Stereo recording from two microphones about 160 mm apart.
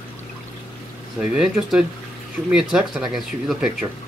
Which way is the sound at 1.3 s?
5° right (ahead or behind).